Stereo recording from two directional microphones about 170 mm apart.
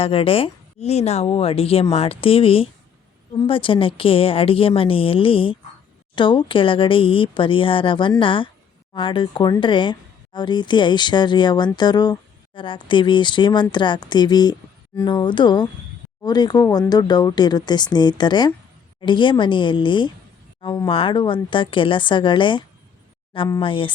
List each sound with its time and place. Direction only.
0.0 s speech: 35° left (ahead or behind)